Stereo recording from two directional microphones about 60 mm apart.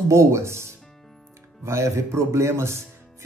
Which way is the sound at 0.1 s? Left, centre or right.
Right.